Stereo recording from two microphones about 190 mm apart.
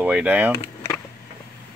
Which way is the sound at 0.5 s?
25° left (ahead or behind).